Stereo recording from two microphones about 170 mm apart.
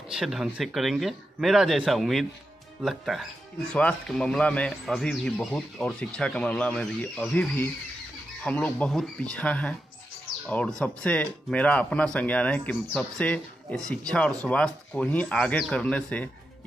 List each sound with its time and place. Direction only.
0.1 s a man's voice: centre (ahead or behind)